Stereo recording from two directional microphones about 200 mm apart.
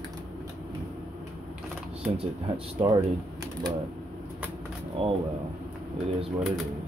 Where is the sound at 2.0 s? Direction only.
25° right (ahead or behind).